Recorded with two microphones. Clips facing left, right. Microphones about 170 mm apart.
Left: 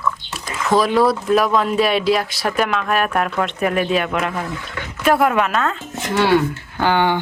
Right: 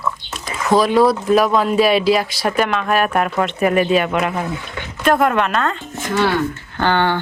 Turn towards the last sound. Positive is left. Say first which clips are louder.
# even
turn(degrees=10)  # may be behind; listen again after turning